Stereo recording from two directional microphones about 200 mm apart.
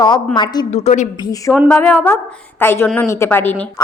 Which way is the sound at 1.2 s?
15° left (ahead or behind).